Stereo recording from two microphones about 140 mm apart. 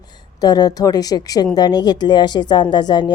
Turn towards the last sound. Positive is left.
turn(degrees=30)  # may be behind; listen again after turning